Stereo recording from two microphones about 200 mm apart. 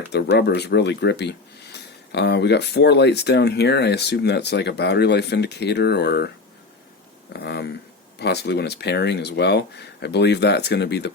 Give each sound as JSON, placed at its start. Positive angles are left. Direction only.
{"t": 0.1, "sound": "speech", "side_deg": 55}
{"t": 7.3, "sound": "speech", "side_deg": 55}